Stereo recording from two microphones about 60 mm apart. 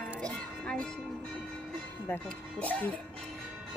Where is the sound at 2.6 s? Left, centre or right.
Left.